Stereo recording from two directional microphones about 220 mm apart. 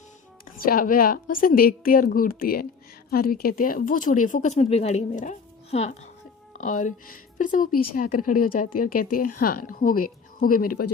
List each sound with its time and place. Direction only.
0.5 s a woman's voice: 40° left (ahead or behind)